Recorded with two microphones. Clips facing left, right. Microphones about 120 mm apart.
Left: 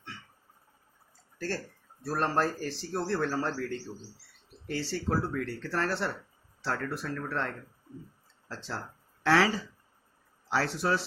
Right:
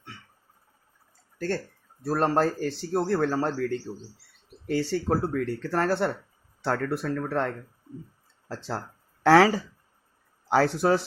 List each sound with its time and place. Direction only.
1.5 s speech: 55° right (ahead or behind)
3.9 s speech: 25° right (ahead or behind)
4.8 s speech: 55° right (ahead or behind)